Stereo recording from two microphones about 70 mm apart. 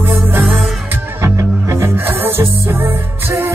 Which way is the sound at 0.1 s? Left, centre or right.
Right.